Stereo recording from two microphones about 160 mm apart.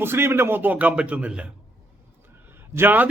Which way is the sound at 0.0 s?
15° right (ahead or behind).